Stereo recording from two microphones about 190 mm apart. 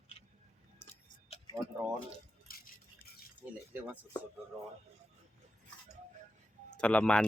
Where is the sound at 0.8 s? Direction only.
10° left (ahead or behind).